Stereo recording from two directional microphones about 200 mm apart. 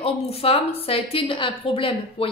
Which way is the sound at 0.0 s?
30° left (ahead or behind).